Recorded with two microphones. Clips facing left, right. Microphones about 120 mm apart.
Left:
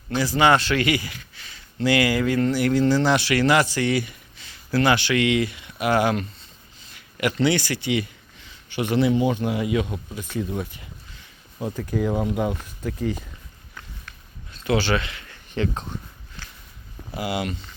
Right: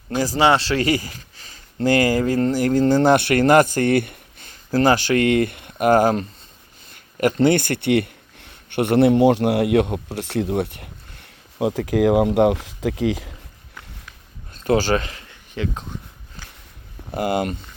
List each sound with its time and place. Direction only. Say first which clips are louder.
0.2 s speech: right 1 dB; 35° right (ahead or behind); by 11.3 s 60° right (ahead or behind)
11.6 s speech: right 7 dB; 85° right
14.5 s speech: right 4 dB; 40° right (ahead or behind)
15.5 s speech: left 1 dB; 5° right (ahead or behind)
17.1 s speech: right 5 dB; 50° right (ahead or behind)